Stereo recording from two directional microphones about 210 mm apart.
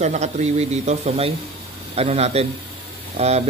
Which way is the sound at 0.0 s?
30° right (ahead or behind).